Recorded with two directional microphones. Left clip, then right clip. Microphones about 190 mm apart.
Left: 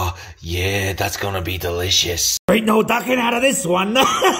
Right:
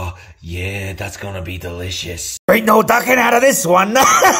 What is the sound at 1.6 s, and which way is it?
Speech, 35° left (ahead or behind).